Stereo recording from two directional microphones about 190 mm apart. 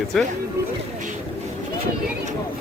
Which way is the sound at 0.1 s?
5° left (ahead or behind).